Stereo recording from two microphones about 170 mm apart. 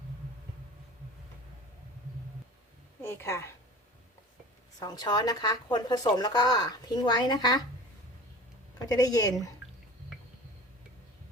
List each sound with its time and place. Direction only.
3.0 s speech: 15° left (ahead or behind)
4.8 s speech: 25° left (ahead or behind)
8.9 s speech: 20° left (ahead or behind)